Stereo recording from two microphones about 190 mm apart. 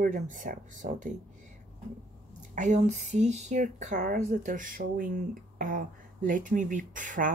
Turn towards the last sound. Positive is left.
turn(degrees=-45)  # may be behind; listen again after turning